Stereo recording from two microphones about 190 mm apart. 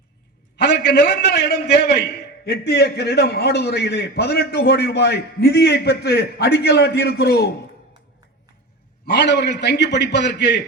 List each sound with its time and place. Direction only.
0.5 s a man's voice: 60° left (ahead or behind)
9.0 s a man's voice: 65° left (ahead or behind)